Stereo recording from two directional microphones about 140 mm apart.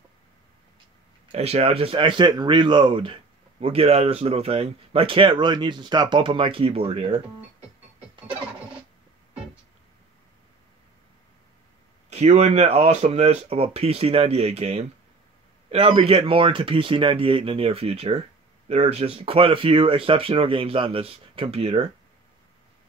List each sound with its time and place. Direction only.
1.3 s speech: 50° right (ahead or behind)
12.1 s speech: 55° right (ahead or behind)